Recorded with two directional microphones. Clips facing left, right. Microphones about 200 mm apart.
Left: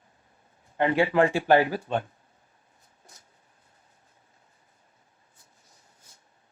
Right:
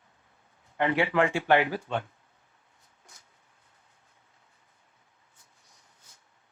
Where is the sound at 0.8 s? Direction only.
25° left (ahead or behind).